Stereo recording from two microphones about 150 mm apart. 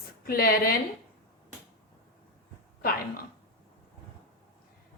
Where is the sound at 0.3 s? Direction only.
80° left.